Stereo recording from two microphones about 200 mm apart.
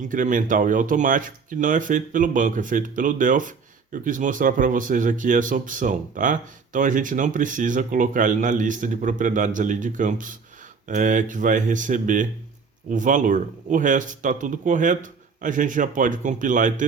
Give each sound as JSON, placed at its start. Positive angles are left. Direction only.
{"t": 0.0, "sound": "speech", "side_deg": -40}